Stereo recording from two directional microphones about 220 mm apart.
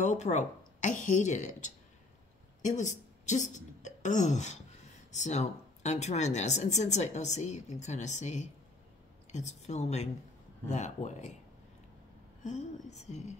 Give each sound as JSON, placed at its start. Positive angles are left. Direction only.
{"t": 0.0, "sound": "speech", "side_deg": 30}
{"t": 12.4, "sound": "speech", "side_deg": 30}